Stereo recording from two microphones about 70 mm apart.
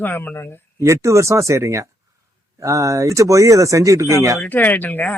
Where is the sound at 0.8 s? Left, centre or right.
Right.